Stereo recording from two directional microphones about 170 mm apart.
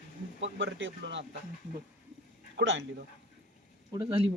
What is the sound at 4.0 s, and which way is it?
Speech, 35° right (ahead or behind).